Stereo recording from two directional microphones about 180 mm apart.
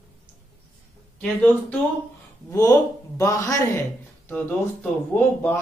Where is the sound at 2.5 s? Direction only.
20° left (ahead or behind).